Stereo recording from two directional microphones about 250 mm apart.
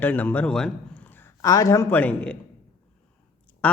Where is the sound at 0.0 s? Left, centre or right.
Centre.